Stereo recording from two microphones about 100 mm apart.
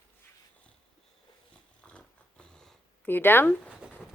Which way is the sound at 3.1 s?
20° left (ahead or behind).